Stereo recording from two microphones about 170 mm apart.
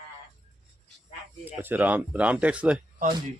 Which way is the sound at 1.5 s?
10° right (ahead or behind).